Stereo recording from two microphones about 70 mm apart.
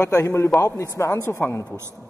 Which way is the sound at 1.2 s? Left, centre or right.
Left.